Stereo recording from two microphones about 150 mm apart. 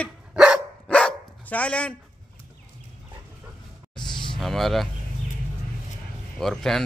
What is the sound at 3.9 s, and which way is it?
Music, 30° left (ahead or behind).